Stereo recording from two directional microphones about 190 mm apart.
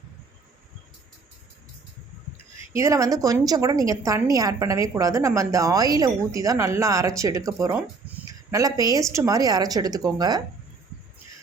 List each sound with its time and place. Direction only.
2.6 s a woman's voice: 15° right (ahead or behind)